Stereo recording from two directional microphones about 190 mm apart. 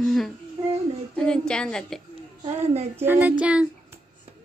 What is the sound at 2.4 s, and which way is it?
Speech, 35° right (ahead or behind).